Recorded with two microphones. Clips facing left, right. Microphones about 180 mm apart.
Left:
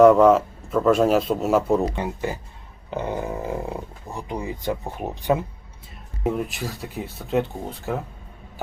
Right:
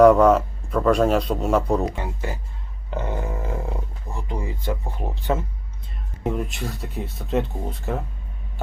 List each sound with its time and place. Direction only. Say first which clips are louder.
0.0 s a man's voice: even; centre (ahead or behind)
2.9 s a sound: left 2 dB; 15° left (ahead or behind)
6.2 s a man's voice: left 1 dB; centre (ahead or behind)